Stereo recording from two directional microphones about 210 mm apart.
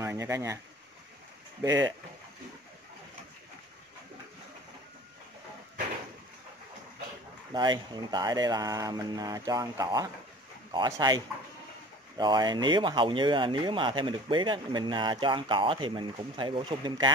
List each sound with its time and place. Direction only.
0.0 s speech: 15° right (ahead or behind)
1.6 s speech: 15° right (ahead or behind)
7.5 s speech: 20° right (ahead or behind)